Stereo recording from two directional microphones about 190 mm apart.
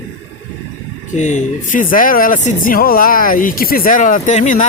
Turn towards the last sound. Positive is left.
turn(degrees=40)  # may be behind; listen again after turning